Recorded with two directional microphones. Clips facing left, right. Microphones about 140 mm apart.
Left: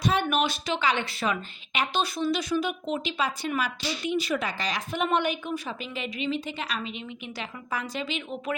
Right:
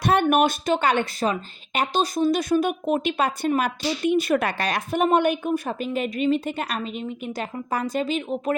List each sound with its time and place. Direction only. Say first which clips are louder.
0.0 s a woman's voice: right 6 dB; 55° right (ahead or behind)